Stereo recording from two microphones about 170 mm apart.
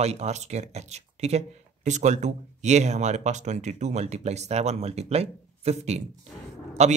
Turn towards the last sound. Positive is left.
turn(degrees=-40)  # may be behind; listen again after turning